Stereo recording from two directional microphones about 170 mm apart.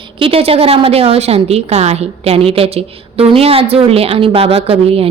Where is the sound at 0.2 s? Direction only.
35° right (ahead or behind).